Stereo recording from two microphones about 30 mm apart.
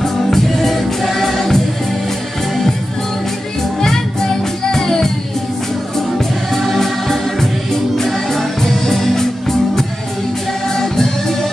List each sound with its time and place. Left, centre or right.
0.0 s music: centre
4.7 s music: centre
6.1 s music: centre
10.8 s music: centre